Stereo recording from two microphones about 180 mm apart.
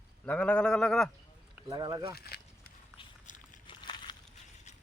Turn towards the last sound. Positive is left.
turn(degrees=25)  # may be behind; listen again after turning